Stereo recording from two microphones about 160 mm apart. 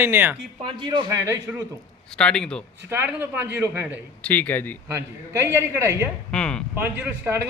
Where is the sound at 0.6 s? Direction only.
30° right (ahead or behind).